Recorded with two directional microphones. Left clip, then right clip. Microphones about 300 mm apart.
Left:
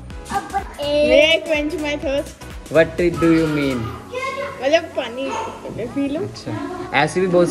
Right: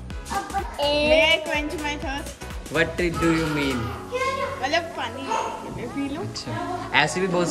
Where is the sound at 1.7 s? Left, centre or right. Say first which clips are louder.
Left 7 dB; centre.